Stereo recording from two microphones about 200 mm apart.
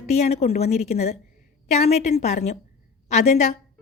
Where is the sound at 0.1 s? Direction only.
35° left (ahead or behind).